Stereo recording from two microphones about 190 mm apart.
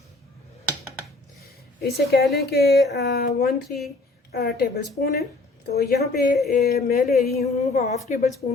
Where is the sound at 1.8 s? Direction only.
60° left (ahead or behind).